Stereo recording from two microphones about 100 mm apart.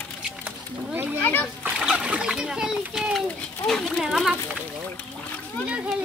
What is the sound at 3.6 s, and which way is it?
Speech, 5° left (ahead or behind).